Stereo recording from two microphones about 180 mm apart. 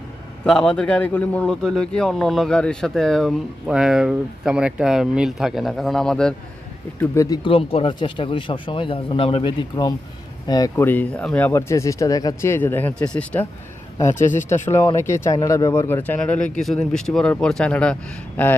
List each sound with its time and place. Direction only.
0.4 s a man's voice: 5° left (ahead or behind)
7.0 s speech: 15° left (ahead or behind)
7.4 s speech: 30° left (ahead or behind); by 13.5 s 10° left (ahead or behind)
14.5 s a man's voice: 15° left (ahead or behind)